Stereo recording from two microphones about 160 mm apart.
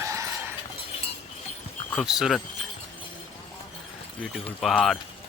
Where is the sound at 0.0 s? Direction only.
20° right (ahead or behind).